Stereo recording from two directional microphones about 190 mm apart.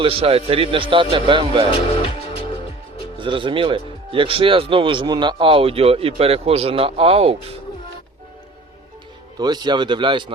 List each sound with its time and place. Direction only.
0.0 s speech: 30° right (ahead or behind)
1.7 s speech: 30° left (ahead or behind)
3.2 s speech: 25° right (ahead or behind)
9.4 s speech: 20° right (ahead or behind)